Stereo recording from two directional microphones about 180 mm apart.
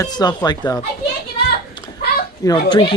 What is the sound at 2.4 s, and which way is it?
Speech, 20° left (ahead or behind).